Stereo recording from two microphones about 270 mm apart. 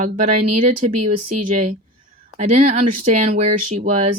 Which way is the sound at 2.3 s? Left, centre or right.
Right.